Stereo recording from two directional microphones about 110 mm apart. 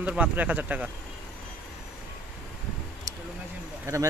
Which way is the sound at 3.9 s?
30° right (ahead or behind).